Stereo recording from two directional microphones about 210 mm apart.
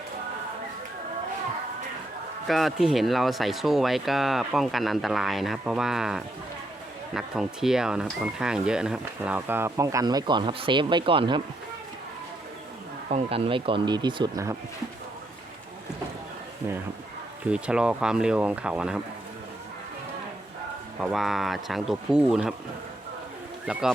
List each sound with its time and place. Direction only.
2.5 s speech: centre (ahead or behind); by 11.4 s 25° right (ahead or behind)
13.1 s speech: 30° right (ahead or behind)
17.4 s speech: 5° right (ahead or behind)
21.0 s speech: centre (ahead or behind)
23.7 s speech: 5° right (ahead or behind)